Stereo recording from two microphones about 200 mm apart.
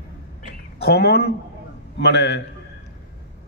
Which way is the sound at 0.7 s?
55° left (ahead or behind).